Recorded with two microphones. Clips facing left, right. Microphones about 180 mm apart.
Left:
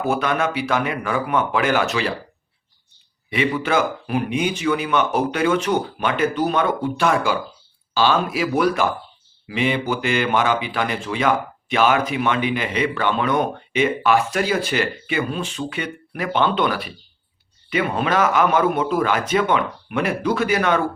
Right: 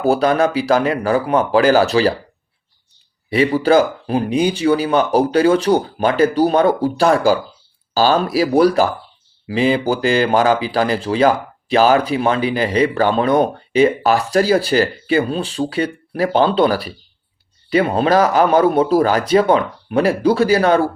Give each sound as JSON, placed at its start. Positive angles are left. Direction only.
{"t": 0.0, "sound": "speech", "side_deg": -35}
{"t": 3.2, "sound": "speech", "side_deg": -35}